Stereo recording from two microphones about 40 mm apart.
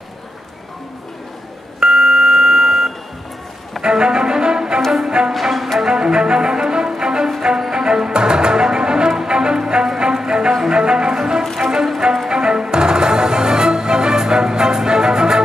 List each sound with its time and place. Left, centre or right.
1.8 s a sound: centre
3.8 s music: centre
5.3 s music: centre
5.8 s music: centre